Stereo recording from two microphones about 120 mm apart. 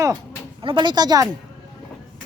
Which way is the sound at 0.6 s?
40° right (ahead or behind).